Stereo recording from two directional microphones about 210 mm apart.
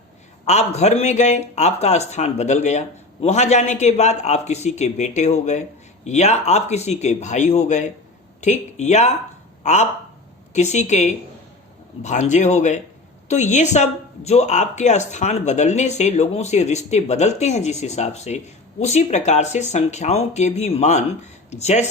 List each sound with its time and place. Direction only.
0.4 s speech: 30° left (ahead or behind)
10.5 s speech: 35° left (ahead or behind)